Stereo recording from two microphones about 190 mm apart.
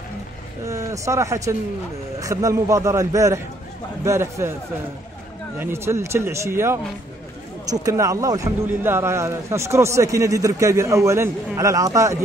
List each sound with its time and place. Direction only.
0.7 s a man's voice: 15° right (ahead or behind)
5.6 s speech: 15° right (ahead or behind)